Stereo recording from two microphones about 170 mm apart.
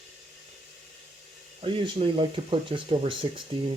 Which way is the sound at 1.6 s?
30° right (ahead or behind).